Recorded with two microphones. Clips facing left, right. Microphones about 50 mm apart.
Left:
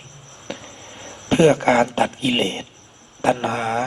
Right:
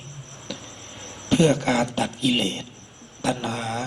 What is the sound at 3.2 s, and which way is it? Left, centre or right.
Speech, left.